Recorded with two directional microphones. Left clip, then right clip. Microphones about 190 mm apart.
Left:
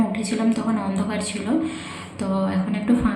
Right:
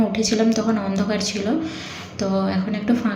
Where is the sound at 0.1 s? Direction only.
15° right (ahead or behind).